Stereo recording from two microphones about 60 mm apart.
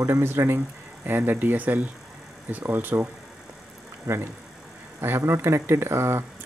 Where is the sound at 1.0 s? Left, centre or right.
Right.